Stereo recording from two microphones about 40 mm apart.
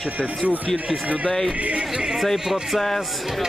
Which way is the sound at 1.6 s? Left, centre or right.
Right.